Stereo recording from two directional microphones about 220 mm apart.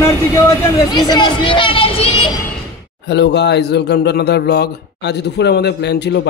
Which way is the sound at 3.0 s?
50° left (ahead or behind).